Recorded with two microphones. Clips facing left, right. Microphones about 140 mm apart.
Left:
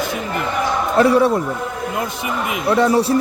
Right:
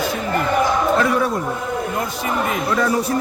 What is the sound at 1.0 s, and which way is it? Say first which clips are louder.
Speech: left 5 dB; 30° left (ahead or behind).